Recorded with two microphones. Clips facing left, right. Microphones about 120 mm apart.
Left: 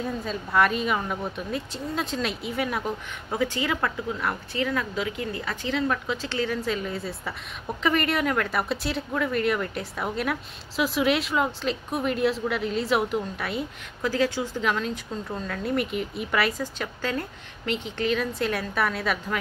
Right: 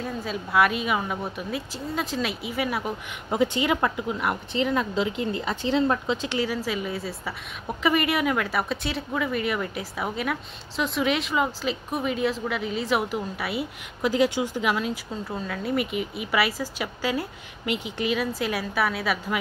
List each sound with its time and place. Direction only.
0.0 s speech: 5° right (ahead or behind)
3.3 s speech: 20° right (ahead or behind)
6.2 s speech: 10° right (ahead or behind)
14.0 s speech: 15° right (ahead or behind)